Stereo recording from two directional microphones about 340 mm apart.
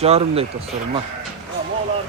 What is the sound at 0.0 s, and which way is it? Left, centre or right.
Speech, centre.